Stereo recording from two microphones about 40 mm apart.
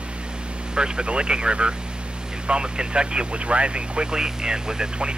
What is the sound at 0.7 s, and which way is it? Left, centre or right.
Speech, right.